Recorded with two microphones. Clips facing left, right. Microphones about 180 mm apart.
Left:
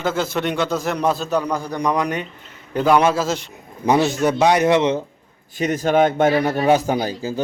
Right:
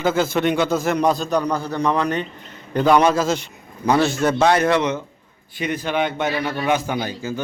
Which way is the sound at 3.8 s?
20° left (ahead or behind).